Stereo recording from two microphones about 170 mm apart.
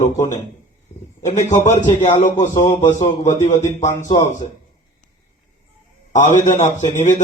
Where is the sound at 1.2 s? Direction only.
45° left (ahead or behind).